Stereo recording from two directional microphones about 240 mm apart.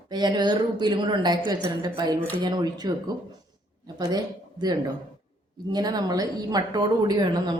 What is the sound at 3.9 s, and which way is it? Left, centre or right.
Speech, centre.